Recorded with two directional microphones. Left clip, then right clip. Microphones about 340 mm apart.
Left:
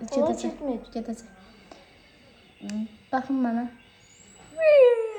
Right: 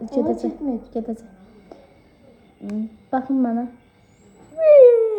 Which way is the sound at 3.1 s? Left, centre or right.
Centre.